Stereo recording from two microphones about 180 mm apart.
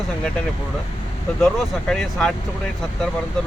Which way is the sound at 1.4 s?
Centre (ahead or behind).